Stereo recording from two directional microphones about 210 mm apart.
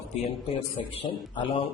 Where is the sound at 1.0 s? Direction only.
25° left (ahead or behind).